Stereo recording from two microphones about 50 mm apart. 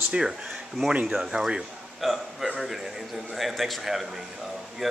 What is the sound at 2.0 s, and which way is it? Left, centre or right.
A man's voice, centre.